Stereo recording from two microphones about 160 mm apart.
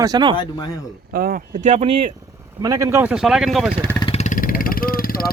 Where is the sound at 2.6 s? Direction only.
20° right (ahead or behind); by 3.7 s centre (ahead or behind).